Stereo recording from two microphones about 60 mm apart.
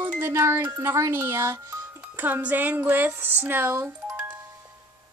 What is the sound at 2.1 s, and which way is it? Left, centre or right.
Speech, right.